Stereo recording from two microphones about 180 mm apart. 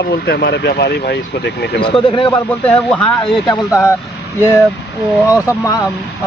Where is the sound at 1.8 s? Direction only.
25° left (ahead or behind).